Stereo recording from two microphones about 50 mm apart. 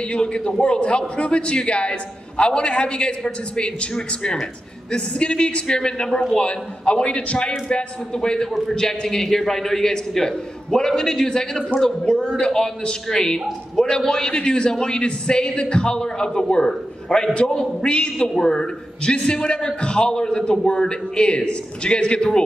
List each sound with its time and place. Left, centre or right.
0.1 s a man's voice: left